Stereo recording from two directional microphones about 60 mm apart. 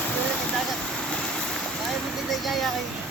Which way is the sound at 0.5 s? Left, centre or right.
Centre.